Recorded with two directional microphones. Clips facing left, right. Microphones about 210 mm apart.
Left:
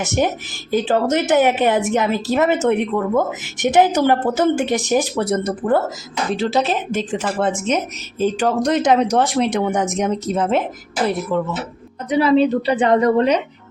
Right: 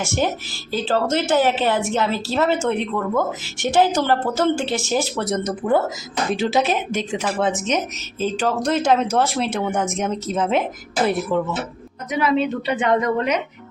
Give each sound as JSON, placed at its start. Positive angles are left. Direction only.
{"t": 0.0, "sound": "a woman's voice", "side_deg": 20}
{"t": 11.3, "sound": "speech", "side_deg": -5}
{"t": 12.0, "sound": "a woman's voice", "side_deg": 30}